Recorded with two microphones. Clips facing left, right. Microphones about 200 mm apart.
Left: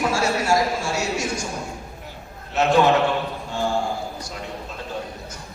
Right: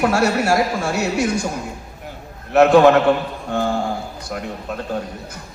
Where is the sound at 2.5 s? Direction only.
60° right (ahead or behind).